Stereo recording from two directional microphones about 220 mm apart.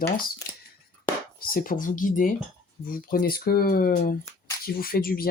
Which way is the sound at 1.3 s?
40° left (ahead or behind).